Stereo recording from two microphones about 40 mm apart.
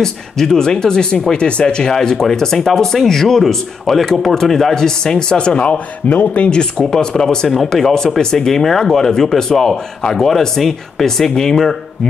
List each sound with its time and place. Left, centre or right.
0.0 s speech: centre
6.0 s speech: left
6.5 s speech: centre
7.4 s speech: centre